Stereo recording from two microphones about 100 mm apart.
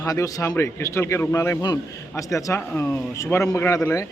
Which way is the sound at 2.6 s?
15° left (ahead or behind).